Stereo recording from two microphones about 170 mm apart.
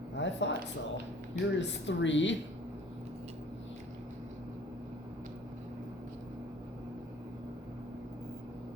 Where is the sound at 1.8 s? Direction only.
90° left.